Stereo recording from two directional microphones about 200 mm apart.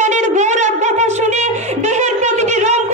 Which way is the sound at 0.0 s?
35° right (ahead or behind).